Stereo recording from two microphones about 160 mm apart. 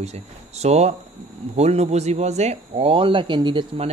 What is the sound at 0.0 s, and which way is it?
Speech, 45° right (ahead or behind).